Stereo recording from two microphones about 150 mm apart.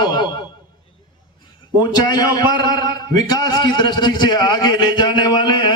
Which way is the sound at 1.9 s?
30° left (ahead or behind).